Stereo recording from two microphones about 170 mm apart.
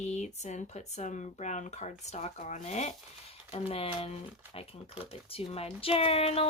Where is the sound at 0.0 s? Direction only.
45° left (ahead or behind).